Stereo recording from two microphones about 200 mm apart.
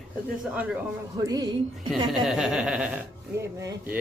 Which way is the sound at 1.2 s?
20° right (ahead or behind).